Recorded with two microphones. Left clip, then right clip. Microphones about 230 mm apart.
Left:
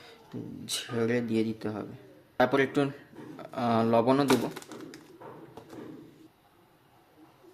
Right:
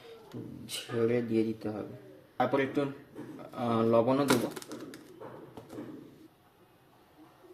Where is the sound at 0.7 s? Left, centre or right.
Left.